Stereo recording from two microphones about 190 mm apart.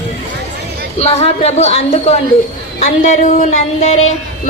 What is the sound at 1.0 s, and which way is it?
A woman's voice, 30° left (ahead or behind).